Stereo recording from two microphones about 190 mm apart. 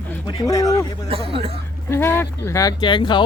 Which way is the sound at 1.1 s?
30° right (ahead or behind).